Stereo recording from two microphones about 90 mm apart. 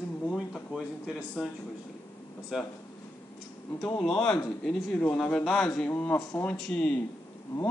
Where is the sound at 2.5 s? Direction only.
5° right (ahead or behind).